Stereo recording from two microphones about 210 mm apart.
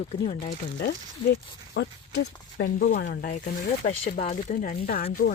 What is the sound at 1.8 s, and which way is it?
Speech, 55° left (ahead or behind).